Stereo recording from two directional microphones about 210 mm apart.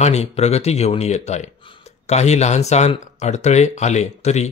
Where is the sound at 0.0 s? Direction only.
30° left (ahead or behind).